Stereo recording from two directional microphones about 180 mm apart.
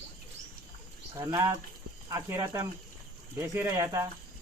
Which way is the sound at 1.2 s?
20° right (ahead or behind).